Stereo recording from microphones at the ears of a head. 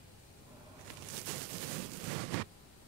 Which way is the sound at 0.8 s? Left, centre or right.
Right.